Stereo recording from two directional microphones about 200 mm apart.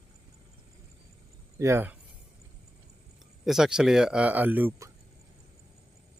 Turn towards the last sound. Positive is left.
turn(degrees=-10)  # may be behind; listen again after turning